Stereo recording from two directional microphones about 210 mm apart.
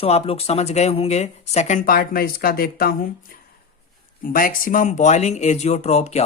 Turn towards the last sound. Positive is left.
turn(degrees=30)  # may be behind; listen again after turning